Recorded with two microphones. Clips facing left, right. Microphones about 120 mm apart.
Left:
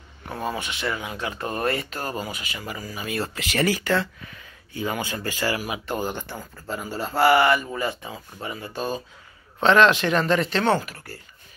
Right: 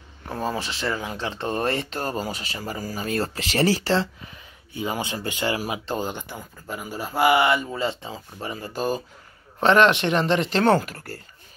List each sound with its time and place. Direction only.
0.3 s speech: 30° right (ahead or behind)
10.6 s speech: 45° right (ahead or behind)